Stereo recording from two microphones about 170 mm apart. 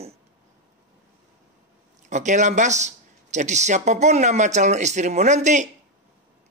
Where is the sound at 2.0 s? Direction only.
45° right (ahead or behind).